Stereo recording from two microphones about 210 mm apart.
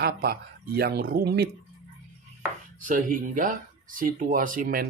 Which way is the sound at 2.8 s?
40° right (ahead or behind).